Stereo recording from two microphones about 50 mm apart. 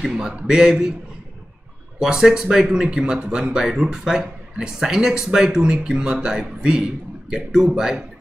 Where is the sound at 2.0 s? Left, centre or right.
Centre.